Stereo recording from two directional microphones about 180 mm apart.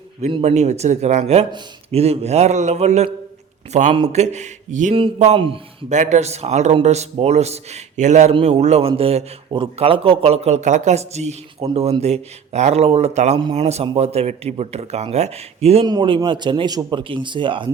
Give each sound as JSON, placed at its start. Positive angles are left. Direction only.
{"t": 0.2, "sound": "a man's voice", "side_deg": -35}